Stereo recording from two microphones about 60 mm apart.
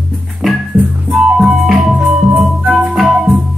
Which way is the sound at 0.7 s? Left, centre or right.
Right.